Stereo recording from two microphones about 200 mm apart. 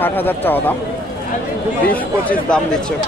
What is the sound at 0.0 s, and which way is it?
Speech, 10° left (ahead or behind).